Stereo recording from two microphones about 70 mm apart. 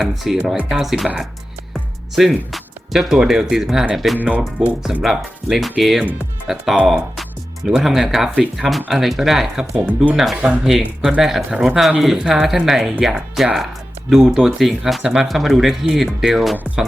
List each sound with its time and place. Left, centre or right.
0.0 s speech: centre
4.2 s speech: right
5.0 s speech: centre
10.3 s speech: right
10.6 s speech: centre